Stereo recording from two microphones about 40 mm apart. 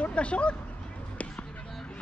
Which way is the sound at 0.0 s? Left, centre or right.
Left.